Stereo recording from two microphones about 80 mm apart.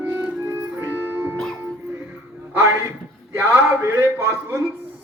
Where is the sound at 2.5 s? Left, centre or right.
Right.